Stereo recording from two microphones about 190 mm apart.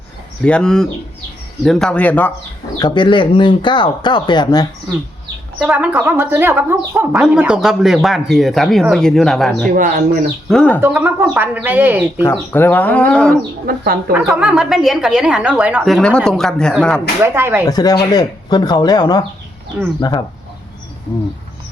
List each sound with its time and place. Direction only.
0.4 s speech: 5° left (ahead or behind)
2.7 s speech: 25° left (ahead or behind)
5.6 s speech: 10° right (ahead or behind)
9.7 s speech: 50° right (ahead or behind)
10.5 s speech: 5° left (ahead or behind)
10.8 s speech: 10° right (ahead or behind)
12.2 s speech: 10° left (ahead or behind)
13.7 s speech: 50° right (ahead or behind)
14.1 s speech: 5° right (ahead or behind)
17.2 s speech: 10° right (ahead or behind)
17.7 s speech: 20° left (ahead or behind)